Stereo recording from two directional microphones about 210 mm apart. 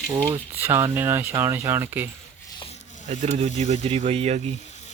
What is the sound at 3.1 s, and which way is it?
Speech, 30° right (ahead or behind).